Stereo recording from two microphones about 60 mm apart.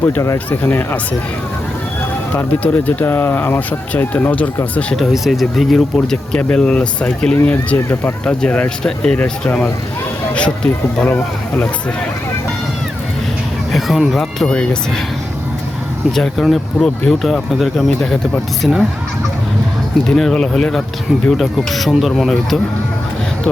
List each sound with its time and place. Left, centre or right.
0.6 s speech: left
2.3 s speech: left
3.0 s speech: left; by 4.9 s centre
4.9 s speech: centre
6.3 s speech: centre
10.3 s speech: centre
13.7 s speech: centre
14.2 s speech: centre
16.1 s speech: centre
20.1 s speech: centre